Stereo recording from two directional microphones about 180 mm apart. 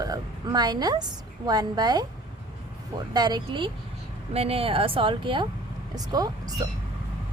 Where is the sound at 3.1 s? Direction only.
25° right (ahead or behind).